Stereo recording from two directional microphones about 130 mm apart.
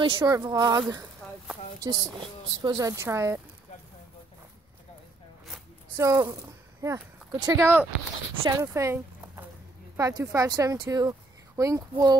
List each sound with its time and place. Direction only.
0.0 s speech: 40° right (ahead or behind)
0.3 s speech: 25° right (ahead or behind)
5.9 s speech: 25° right (ahead or behind)
7.6 s speech: 15° right (ahead or behind)